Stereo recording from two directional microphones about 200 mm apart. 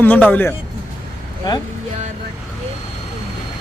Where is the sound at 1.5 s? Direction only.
20° left (ahead or behind).